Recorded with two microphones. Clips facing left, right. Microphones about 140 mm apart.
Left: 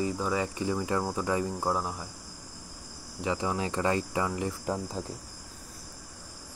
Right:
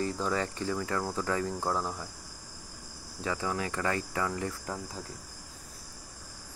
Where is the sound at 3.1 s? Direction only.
20° left (ahead or behind).